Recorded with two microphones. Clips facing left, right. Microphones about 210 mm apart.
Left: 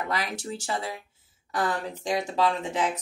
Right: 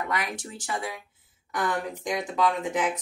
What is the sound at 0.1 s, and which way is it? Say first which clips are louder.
A woman's voice: left 1 dB; 30° left (ahead or behind).